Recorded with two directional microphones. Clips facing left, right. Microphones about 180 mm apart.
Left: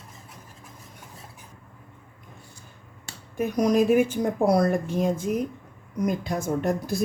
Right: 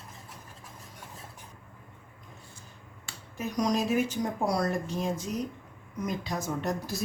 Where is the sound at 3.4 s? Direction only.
55° left (ahead or behind).